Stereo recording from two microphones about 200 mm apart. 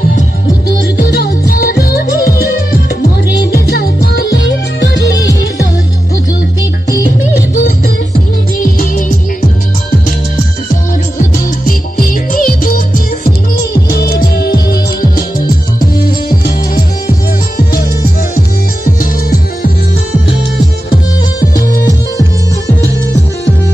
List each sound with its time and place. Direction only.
0.9 s music: 50° left (ahead or behind)
3.5 s music: 50° left (ahead or behind)
7.3 s music: 45° left (ahead or behind)
11.1 s music: 45° left (ahead or behind)
21.5 s music: 45° left (ahead or behind)